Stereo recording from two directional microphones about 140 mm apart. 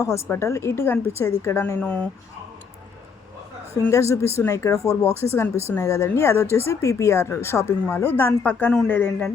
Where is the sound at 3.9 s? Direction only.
20° left (ahead or behind).